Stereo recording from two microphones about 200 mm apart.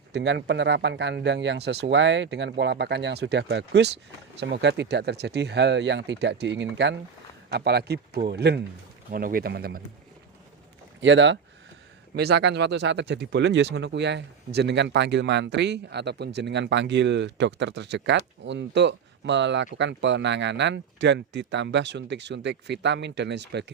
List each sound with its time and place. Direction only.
0.1 s speech: 60° right (ahead or behind)
11.0 s speech: 65° right (ahead or behind)
12.1 s speech: 55° right (ahead or behind)